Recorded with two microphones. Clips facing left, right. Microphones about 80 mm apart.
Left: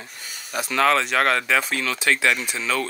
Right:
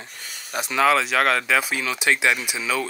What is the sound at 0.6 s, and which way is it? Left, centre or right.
Speech, centre.